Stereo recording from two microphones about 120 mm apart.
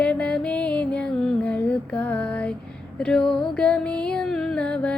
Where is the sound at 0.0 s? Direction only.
10° left (ahead or behind).